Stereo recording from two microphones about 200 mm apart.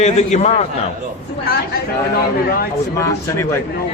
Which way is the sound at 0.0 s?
35° left (ahead or behind).